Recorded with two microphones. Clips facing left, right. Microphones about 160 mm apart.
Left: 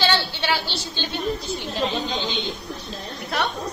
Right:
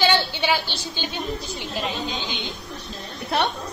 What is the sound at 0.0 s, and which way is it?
A woman's voice, 15° right (ahead or behind).